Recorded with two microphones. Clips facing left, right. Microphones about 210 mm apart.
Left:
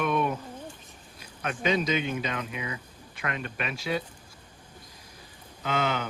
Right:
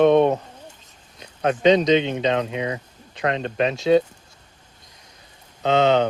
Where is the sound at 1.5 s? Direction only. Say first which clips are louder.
Right 11 dB; 25° right (ahead or behind).